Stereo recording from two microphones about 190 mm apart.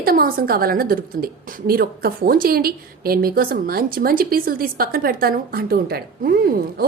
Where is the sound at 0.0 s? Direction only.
50° right (ahead or behind).